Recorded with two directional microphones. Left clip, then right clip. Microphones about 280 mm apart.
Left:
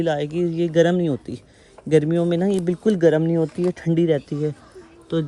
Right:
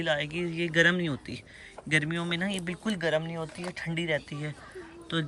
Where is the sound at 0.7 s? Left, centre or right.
Centre.